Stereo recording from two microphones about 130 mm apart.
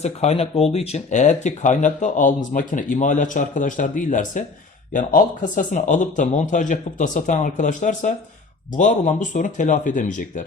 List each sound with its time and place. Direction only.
0.0 s speech: 55° left (ahead or behind); by 10.4 s 80° left